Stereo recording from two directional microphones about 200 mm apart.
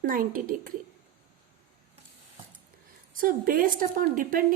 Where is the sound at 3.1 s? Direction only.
45° right (ahead or behind).